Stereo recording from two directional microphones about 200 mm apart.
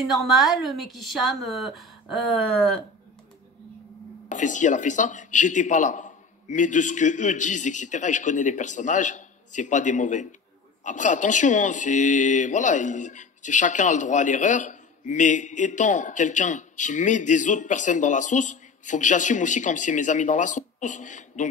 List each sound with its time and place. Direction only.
0.0 s a woman's voice: centre (ahead or behind)
4.3 s speech: 40° left (ahead or behind)